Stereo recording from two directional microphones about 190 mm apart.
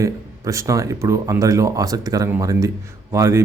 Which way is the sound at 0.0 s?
15° right (ahead or behind).